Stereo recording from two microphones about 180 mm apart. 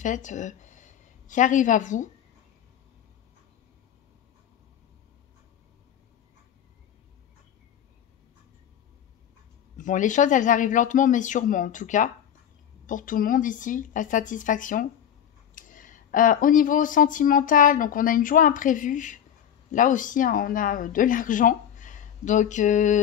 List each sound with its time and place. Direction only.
0.0 s a woman's voice: 45° left (ahead or behind)
9.8 s speech: 45° left (ahead or behind)